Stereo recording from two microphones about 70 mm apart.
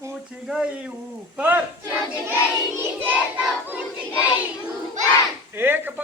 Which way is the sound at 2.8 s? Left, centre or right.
Right.